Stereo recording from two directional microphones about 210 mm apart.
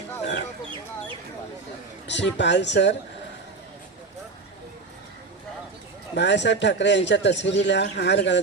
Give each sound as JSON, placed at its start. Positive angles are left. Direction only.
{"t": 2.0, "sound": "a man's voice", "side_deg": 55}
{"t": 6.1, "sound": "a man's voice", "side_deg": 55}